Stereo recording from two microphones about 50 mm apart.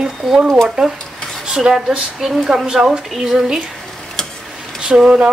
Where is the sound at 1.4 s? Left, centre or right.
Centre.